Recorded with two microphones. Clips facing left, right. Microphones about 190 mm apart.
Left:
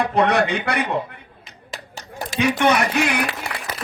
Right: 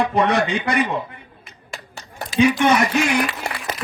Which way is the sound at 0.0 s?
65° left (ahead or behind).